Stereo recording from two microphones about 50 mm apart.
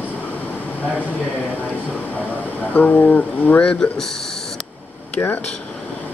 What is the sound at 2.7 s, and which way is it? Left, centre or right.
Speech, left.